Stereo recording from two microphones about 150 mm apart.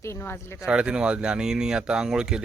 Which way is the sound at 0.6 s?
5° right (ahead or behind).